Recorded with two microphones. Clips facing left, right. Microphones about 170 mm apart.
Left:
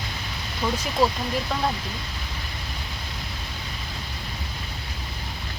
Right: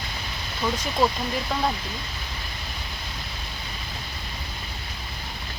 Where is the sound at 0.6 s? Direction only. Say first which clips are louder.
Left 1 dB; centre (ahead or behind).